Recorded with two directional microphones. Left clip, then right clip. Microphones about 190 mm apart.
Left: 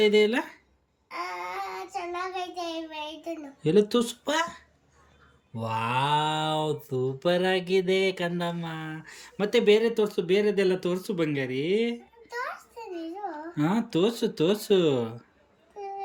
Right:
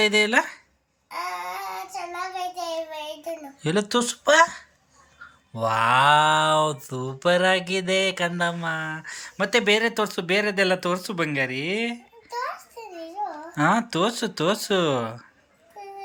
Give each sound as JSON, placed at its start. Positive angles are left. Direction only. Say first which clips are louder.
{"t": 0.0, "sound": "mantra", "louder": "right 2 dB", "side_deg": 5}
{"t": 1.5, "sound": "child singing", "louder": "right 2 dB", "side_deg": 30}
{"t": 3.6, "sound": "mantra", "louder": "left 1 dB", "side_deg": 5}